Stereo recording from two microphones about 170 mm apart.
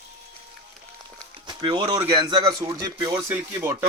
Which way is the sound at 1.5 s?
25° right (ahead or behind).